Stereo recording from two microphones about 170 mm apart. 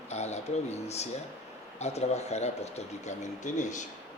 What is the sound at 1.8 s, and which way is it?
Speech, 40° left (ahead or behind).